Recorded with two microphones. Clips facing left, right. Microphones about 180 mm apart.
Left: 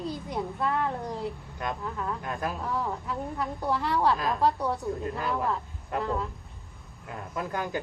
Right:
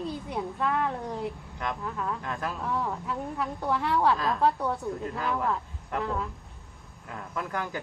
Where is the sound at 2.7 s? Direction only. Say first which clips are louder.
Even; centre (ahead or behind).